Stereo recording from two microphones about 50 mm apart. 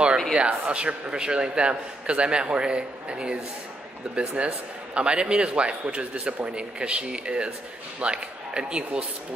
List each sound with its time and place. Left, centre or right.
0.3 s a man's voice: right